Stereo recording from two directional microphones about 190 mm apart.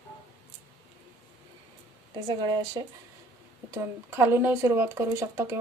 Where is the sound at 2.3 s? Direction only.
20° right (ahead or behind).